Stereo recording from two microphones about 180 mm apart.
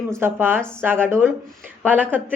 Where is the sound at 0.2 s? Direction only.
10° right (ahead or behind).